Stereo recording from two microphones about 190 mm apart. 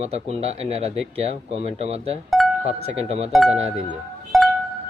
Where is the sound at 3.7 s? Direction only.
Centre (ahead or behind).